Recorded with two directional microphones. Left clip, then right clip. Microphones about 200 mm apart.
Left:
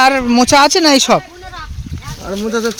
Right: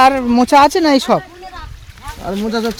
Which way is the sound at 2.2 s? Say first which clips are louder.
Left 1 dB; 40° right (ahead or behind).